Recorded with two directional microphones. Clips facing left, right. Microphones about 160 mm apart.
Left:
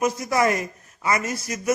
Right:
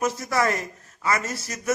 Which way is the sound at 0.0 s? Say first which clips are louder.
Left 2 dB; 15° left (ahead or behind).